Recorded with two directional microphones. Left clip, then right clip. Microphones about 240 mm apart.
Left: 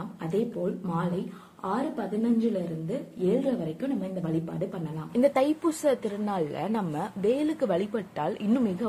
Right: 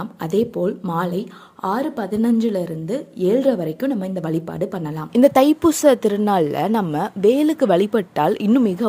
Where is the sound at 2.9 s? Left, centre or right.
Right.